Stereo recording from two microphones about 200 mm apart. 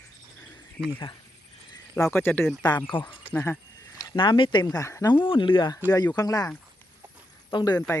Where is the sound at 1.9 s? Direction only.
10° left (ahead or behind).